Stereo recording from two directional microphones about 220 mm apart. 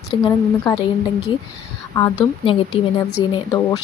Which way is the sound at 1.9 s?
20° left (ahead or behind).